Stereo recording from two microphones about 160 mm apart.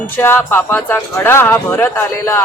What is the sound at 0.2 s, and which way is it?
A man's voice, 15° left (ahead or behind).